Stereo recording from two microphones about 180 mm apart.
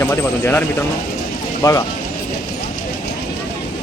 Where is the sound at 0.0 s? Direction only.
10° left (ahead or behind).